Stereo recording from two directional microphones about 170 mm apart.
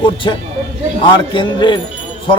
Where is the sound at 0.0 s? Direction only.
30° left (ahead or behind).